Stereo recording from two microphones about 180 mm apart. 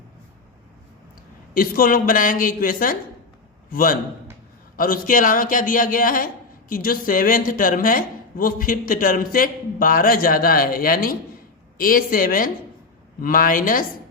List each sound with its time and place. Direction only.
1.5 s a man's voice: 55° left (ahead or behind)